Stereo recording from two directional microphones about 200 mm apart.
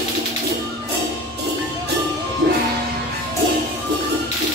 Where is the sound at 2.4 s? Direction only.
55° right (ahead or behind).